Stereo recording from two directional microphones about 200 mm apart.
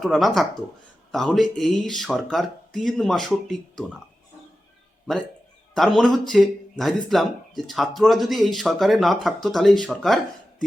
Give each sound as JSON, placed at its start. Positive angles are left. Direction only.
{"t": 0.0, "sound": "speech", "side_deg": 0}
{"t": 5.7, "sound": "speech", "side_deg": 0}